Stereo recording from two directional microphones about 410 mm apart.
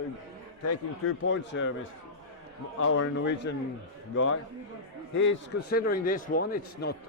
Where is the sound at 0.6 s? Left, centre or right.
Left.